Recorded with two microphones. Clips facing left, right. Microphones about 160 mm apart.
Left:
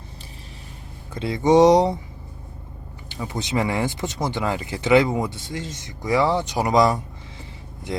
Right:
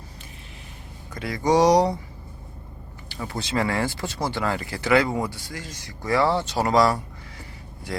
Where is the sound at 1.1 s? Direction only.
25° left (ahead or behind).